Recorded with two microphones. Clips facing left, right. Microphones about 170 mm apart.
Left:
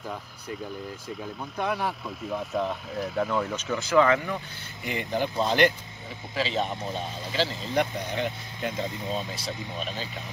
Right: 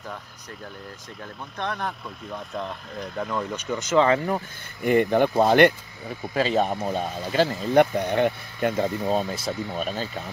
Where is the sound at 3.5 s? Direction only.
20° right (ahead or behind).